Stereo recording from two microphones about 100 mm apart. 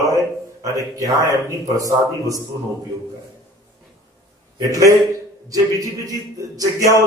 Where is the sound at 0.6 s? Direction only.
35° right (ahead or behind).